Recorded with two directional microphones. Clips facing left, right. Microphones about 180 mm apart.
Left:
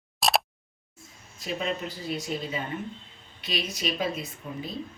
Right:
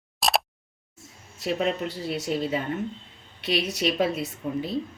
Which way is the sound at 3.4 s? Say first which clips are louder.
Right 6 dB; 70° right (ahead or behind).